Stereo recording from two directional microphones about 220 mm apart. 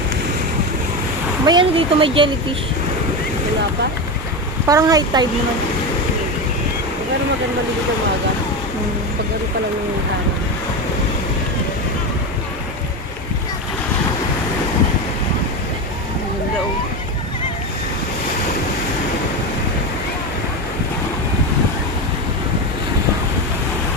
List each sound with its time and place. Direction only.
1.5 s speech: 20° right (ahead or behind)
4.6 s speech: 15° right (ahead or behind)